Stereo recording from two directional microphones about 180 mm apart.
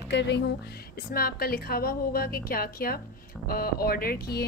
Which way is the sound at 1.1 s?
55° left (ahead or behind).